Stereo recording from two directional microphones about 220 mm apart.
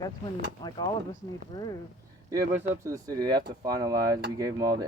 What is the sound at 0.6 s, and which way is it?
Speech, 20° left (ahead or behind).